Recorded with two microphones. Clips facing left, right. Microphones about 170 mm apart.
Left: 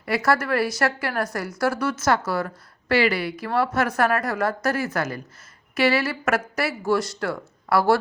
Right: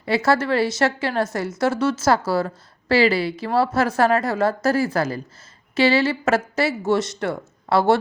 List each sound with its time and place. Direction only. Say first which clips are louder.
0.0 s a woman's voice: right 3 dB; 25° right (ahead or behind)